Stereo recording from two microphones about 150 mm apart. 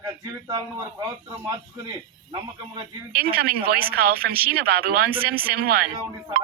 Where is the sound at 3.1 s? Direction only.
90° right.